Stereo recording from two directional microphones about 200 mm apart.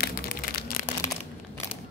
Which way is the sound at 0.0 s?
50° left (ahead or behind).